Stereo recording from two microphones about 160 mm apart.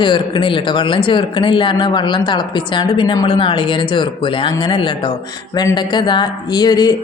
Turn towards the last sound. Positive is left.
turn(degrees=25)  # may be behind; listen again after turning